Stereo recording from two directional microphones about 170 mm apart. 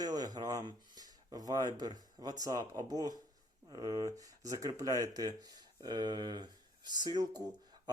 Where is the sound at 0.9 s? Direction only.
20° right (ahead or behind).